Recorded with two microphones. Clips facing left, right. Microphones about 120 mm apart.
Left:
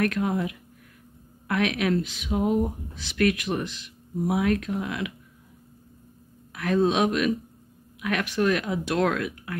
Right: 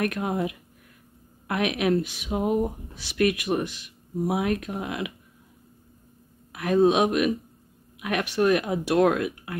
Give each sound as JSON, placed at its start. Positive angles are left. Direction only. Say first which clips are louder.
{"t": 0.0, "sound": "speech", "louder": "left 1 dB", "side_deg": -20}
{"t": 6.5, "sound": "speech", "louder": "right 3 dB", "side_deg": -20}